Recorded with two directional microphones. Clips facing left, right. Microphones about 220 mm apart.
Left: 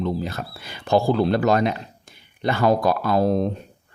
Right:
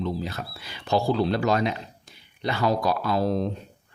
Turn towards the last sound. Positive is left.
turn(degrees=50)  # may be behind; listen again after turning